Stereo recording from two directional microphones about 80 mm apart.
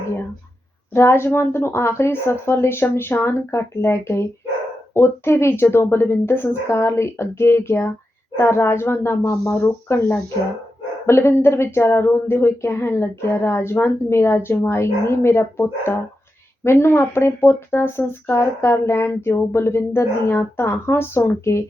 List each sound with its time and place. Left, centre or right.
0.9 s speech: left